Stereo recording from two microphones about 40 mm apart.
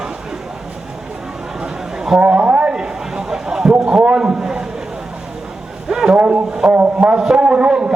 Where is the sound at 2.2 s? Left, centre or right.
Right.